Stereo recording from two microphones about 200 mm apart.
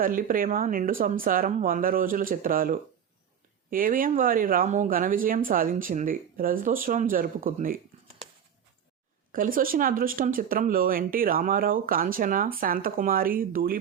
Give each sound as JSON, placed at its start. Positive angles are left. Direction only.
{"t": 0.0, "sound": "speech", "side_deg": -45}
{"t": 9.3, "sound": "speech", "side_deg": -45}